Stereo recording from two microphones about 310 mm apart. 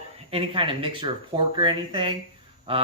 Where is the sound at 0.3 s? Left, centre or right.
Centre.